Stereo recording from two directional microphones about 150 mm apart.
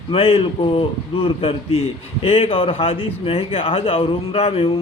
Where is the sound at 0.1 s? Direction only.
40° left (ahead or behind).